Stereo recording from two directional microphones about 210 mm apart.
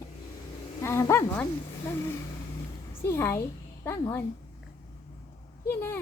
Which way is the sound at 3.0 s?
15° left (ahead or behind).